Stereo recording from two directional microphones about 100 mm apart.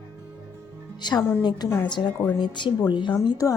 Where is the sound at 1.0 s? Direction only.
45° left (ahead or behind).